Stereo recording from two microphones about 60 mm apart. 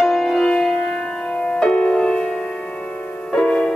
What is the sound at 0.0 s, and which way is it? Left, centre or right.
Music, centre.